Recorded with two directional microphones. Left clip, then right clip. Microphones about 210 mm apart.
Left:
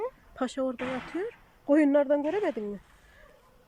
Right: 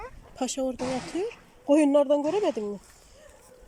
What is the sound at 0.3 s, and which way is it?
Speech, 5° right (ahead or behind).